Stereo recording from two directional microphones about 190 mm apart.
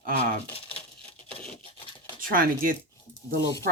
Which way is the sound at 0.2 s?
30° left (ahead or behind).